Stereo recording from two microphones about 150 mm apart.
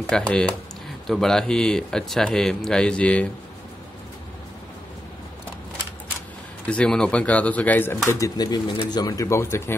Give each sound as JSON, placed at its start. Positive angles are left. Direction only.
{"t": 0.1, "sound": "a man's voice", "side_deg": 5}
{"t": 6.6, "sound": "speech", "side_deg": 5}
{"t": 8.1, "sound": "speech", "side_deg": 25}